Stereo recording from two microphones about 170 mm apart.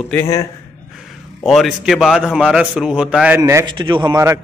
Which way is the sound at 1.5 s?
Centre (ahead or behind).